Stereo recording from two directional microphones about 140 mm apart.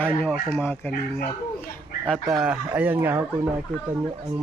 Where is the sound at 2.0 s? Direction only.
Centre (ahead or behind).